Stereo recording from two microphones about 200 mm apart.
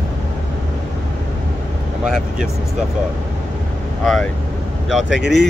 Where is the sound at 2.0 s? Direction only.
5° right (ahead or behind).